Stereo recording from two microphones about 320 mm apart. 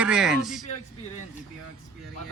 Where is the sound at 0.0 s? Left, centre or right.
Centre.